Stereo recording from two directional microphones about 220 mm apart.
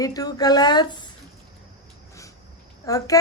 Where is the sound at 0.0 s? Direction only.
15° left (ahead or behind).